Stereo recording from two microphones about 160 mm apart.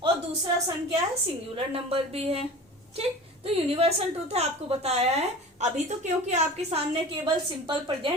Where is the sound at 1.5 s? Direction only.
35° right (ahead or behind).